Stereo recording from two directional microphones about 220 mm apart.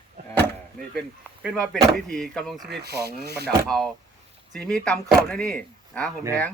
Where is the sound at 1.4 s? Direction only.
Centre (ahead or behind).